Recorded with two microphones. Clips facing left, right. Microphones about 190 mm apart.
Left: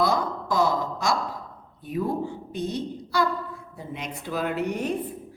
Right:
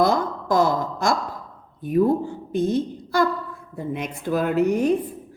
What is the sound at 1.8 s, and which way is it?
A woman's voice, 50° right (ahead or behind).